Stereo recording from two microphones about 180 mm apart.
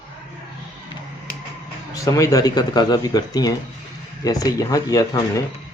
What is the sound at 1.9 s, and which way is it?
Speech, 20° left (ahead or behind).